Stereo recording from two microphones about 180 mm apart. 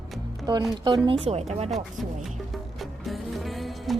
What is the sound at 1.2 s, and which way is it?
Speech, 35° right (ahead or behind).